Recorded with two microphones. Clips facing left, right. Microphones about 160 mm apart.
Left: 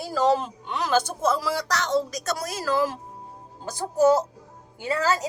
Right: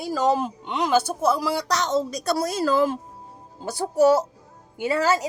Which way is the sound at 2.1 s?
30° right (ahead or behind).